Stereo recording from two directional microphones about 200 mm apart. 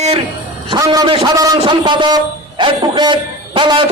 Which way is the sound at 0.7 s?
20° right (ahead or behind).